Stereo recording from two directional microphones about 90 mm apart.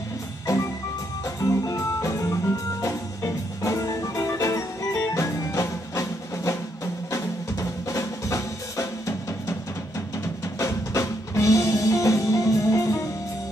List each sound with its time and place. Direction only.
0.5 s music: 35° left (ahead or behind)